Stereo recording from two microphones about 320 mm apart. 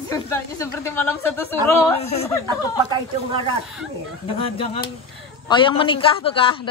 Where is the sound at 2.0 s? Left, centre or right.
Centre.